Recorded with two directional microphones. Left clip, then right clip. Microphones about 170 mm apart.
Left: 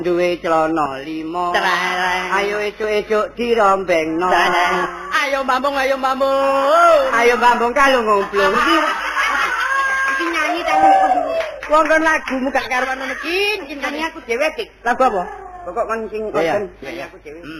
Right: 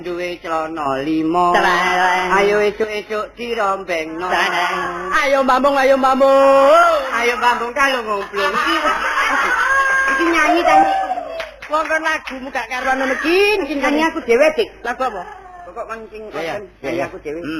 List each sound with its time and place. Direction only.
0.0 s speech: 30° right (ahead or behind)
0.9 s mantra: 30° left (ahead or behind)
2.9 s speech: 30° right (ahead or behind)
5.1 s mantra: 30° left (ahead or behind)
7.1 s speech: 30° right (ahead or behind)
9.0 s snicker: 30° left (ahead or behind)
11.3 s speech: 30° right (ahead or behind)
12.9 s mantra: 30° left (ahead or behind)
14.8 s speech: 30° right (ahead or behind)